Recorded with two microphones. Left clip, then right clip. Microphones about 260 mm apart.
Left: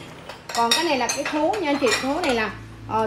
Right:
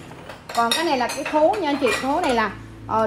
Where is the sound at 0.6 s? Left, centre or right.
Centre.